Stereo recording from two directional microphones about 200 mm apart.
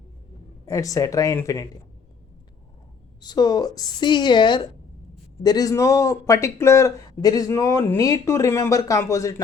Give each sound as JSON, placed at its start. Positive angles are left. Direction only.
{"t": 0.6, "sound": "speech", "side_deg": 15}
{"t": 3.2, "sound": "a woman's voice", "side_deg": 20}